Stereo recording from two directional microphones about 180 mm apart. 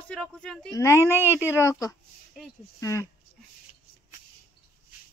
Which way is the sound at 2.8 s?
15° left (ahead or behind).